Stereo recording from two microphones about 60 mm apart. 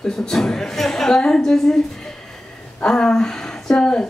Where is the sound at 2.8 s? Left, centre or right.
Centre.